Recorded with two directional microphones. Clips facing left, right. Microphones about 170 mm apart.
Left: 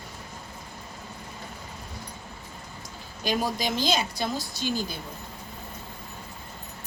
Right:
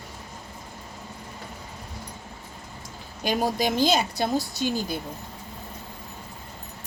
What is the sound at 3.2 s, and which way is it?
A woman's voice, 55° right (ahead or behind).